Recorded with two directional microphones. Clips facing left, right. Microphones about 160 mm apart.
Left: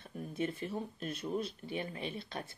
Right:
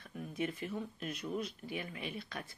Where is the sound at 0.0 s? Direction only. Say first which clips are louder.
Left 1 dB; 30° left (ahead or behind).